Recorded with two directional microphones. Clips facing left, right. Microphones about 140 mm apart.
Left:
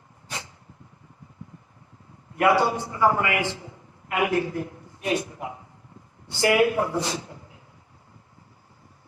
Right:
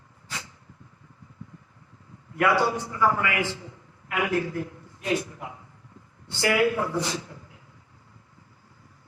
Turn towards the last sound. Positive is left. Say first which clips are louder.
# left 1 dB
turn(degrees=20)  # may be behind; listen again after turning